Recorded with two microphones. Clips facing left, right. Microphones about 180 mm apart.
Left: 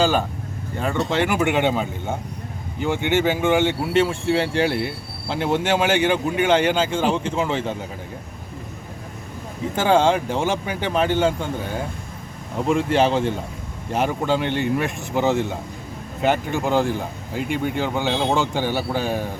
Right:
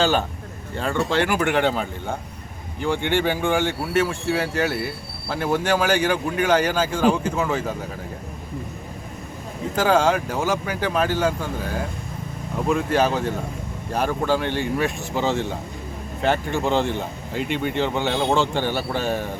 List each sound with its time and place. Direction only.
0.8 s speech: 20° left (ahead or behind)
9.7 s speech: 25° left (ahead or behind); by 18.3 s centre (ahead or behind)
18.3 s speech: 10° left (ahead or behind)